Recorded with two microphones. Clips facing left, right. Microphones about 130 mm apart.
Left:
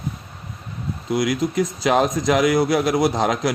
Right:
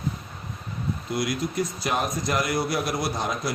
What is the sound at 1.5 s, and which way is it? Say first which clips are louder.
A man's voice: left 10 dB; 90° left.